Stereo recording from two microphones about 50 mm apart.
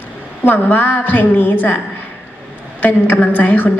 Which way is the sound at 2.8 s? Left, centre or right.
Left.